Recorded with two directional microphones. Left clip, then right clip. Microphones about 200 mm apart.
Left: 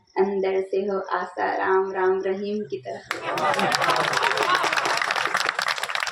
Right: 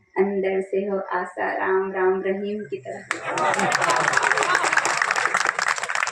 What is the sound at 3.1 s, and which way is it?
Speech, centre (ahead or behind).